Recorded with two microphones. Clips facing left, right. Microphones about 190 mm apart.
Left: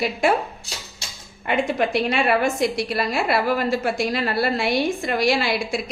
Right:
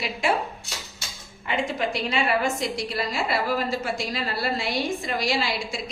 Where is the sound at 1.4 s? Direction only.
60° left (ahead or behind).